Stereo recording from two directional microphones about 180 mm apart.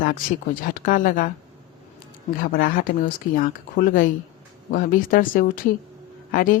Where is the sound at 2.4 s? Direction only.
50° left (ahead or behind).